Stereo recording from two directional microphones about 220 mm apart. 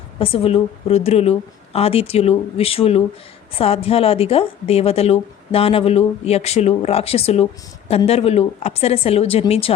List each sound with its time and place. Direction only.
0.2 s a woman's voice: 25° left (ahead or behind)